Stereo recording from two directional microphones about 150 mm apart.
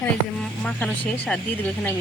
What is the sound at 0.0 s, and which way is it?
Speech, 5° left (ahead or behind).